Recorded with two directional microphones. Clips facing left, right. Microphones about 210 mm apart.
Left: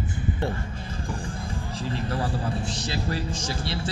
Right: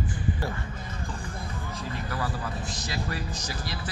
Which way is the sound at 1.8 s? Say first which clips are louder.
Left 5 dB; 30° left (ahead or behind).